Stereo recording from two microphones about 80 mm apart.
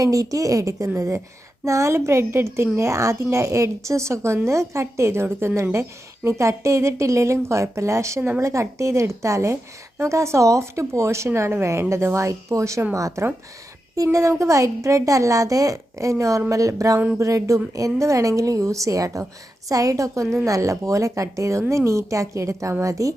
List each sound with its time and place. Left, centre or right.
0.0 s a woman's voice: right